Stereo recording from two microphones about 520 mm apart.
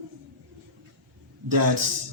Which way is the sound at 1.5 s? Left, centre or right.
Right.